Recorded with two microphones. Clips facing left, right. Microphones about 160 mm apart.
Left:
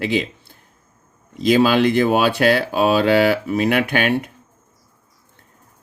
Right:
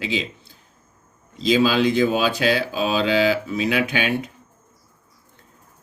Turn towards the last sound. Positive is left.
turn(degrees=55)  # may be behind; listen again after turning